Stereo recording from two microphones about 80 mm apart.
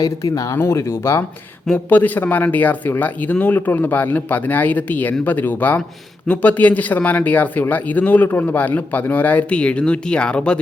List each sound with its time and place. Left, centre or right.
0.0 s speech: left
0.5 s speech: left
1.9 s a man's voice: left